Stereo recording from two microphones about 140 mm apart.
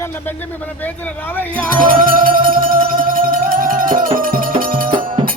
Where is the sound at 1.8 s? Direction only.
85° right.